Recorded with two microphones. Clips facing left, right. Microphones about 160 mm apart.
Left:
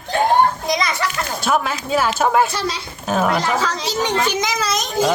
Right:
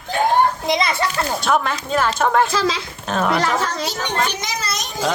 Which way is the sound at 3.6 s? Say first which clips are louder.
Left 3 dB; 90° left.